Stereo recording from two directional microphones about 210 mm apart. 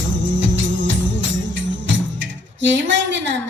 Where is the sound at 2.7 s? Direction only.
60° right (ahead or behind).